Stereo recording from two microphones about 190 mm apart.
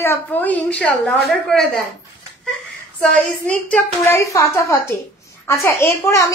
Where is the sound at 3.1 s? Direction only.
5° left (ahead or behind).